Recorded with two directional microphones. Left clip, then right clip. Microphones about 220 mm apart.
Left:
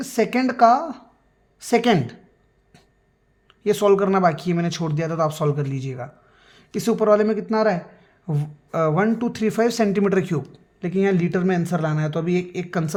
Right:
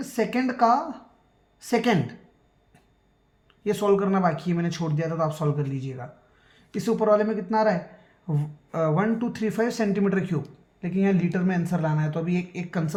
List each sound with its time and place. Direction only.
0.0 s a woman's voice: 45° left (ahead or behind)
3.6 s speech: 45° left (ahead or behind)